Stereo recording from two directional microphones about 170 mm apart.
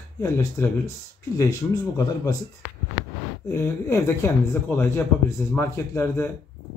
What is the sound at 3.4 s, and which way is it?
Speech, 15° left (ahead or behind).